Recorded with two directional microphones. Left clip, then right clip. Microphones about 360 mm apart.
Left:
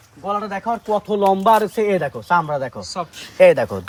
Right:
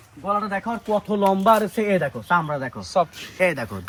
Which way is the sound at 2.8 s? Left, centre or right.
Centre.